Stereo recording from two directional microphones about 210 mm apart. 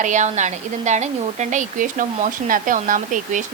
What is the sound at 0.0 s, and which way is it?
Speech, 35° right (ahead or behind).